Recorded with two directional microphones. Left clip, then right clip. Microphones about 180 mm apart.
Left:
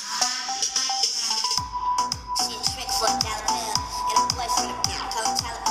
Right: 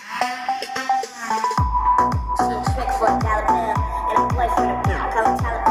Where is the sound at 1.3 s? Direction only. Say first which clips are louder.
Right 6 dB; 20° right (ahead or behind).